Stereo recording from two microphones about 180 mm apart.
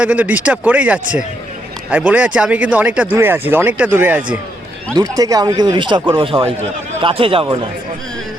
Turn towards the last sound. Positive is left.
turn(degrees=-30)  # may be behind; listen again after turning